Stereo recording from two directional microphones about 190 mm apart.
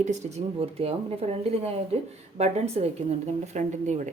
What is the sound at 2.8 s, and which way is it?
A woman's voice, 35° right (ahead or behind).